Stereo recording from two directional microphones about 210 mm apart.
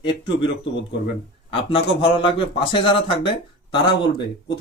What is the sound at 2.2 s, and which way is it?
Speech, 25° left (ahead or behind).